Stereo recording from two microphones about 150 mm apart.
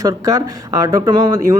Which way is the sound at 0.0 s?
25° right (ahead or behind).